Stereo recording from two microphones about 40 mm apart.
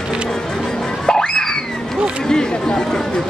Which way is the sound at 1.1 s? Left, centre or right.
Centre.